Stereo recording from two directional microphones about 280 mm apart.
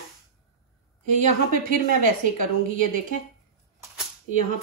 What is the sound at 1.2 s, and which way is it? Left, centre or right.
Speech, right.